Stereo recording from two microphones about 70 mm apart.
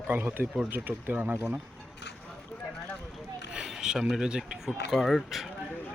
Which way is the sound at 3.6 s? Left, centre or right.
Centre.